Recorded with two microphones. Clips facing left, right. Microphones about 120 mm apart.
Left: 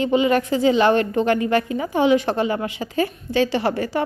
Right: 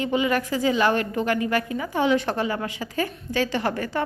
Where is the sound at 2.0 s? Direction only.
20° left (ahead or behind).